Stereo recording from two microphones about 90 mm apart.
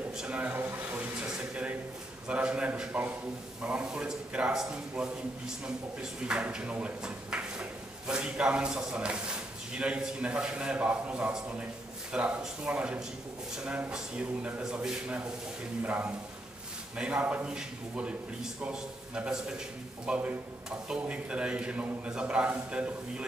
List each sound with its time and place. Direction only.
0.2 s speech: 15° right (ahead or behind)
6.2 s speech: 10° right (ahead or behind)